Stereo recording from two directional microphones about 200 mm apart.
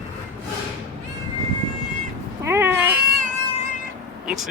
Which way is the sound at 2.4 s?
10° right (ahead or behind).